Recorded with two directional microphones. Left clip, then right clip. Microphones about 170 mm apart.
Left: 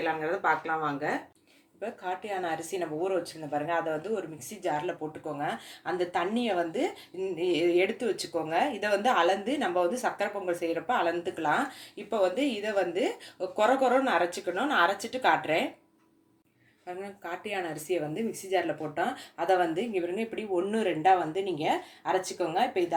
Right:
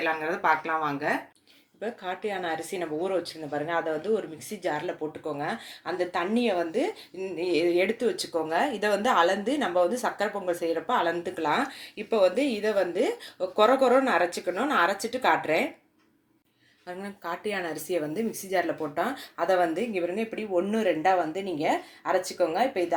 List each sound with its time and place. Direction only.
0.0 s speech: 55° right (ahead or behind)
1.8 s speech: 35° right (ahead or behind)
16.8 s speech: 35° right (ahead or behind)